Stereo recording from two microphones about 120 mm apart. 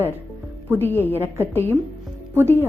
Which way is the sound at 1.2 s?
15° right (ahead or behind).